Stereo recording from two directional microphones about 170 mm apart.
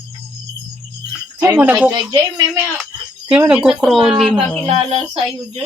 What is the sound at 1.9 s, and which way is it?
Speech, 25° right (ahead or behind).